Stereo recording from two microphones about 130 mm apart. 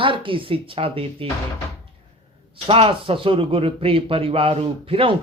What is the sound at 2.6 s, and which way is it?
A man's voice, 45° right (ahead or behind).